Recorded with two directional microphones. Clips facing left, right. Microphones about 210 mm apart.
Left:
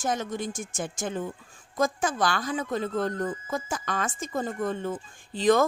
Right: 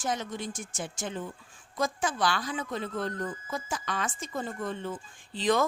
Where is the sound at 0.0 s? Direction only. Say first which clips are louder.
Left 4 dB; 45° left (ahead or behind).